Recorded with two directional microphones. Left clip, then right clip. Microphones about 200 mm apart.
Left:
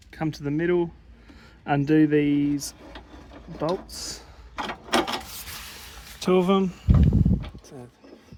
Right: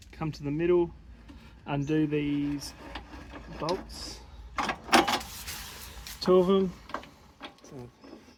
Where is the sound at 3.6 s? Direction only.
75° left (ahead or behind).